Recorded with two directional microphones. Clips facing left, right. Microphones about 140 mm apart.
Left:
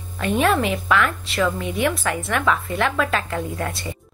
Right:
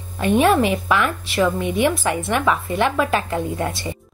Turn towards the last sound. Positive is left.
turn(degrees=-20)  # may be behind; listen again after turning